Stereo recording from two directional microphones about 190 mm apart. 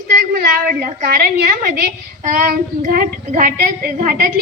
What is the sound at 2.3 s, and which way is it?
Speech, 45° right (ahead or behind).